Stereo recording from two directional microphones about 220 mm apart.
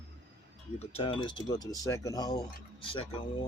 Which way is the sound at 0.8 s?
25° left (ahead or behind).